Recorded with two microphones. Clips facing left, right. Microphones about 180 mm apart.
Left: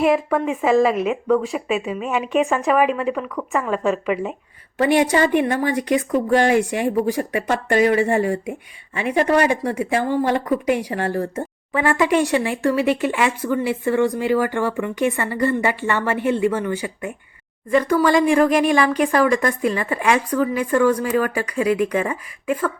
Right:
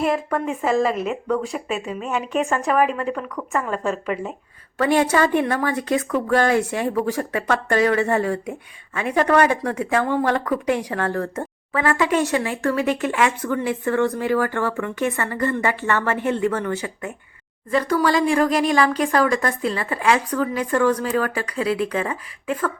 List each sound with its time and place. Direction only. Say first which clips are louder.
0.0 s speech: left 4 dB; 5° left (ahead or behind)
6.1 s speech: left 3 dB; 40° left (ahead or behind)
6.3 s speech: left 2 dB; 15° left (ahead or behind)